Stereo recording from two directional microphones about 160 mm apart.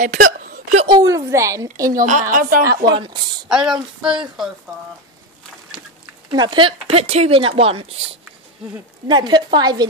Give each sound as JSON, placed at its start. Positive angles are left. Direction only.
{"t": 0.0, "sound": "a sound", "side_deg": -55}
{"t": 0.8, "sound": "speech", "side_deg": -30}
{"t": 1.1, "sound": "a woman's voice", "side_deg": -20}
{"t": 1.9, "sound": "a woman's voice", "side_deg": -55}
{"t": 3.4, "sound": "a woman's voice", "side_deg": -5}
{"t": 6.3, "sound": "speech", "side_deg": -30}
{"t": 9.0, "sound": "a woman's voice", "side_deg": -25}